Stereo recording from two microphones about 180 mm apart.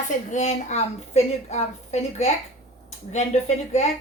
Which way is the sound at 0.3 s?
40° left (ahead or behind).